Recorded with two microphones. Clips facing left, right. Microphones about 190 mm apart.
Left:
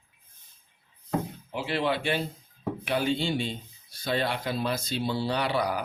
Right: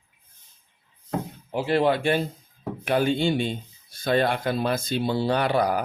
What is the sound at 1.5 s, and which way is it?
Speech, 45° right (ahead or behind).